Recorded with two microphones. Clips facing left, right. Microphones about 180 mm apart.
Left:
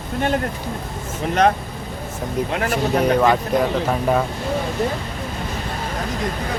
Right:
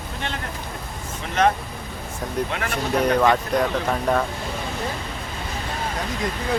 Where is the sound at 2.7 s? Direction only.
5° left (ahead or behind).